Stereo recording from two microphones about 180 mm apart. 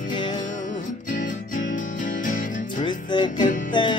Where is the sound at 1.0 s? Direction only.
45° left (ahead or behind).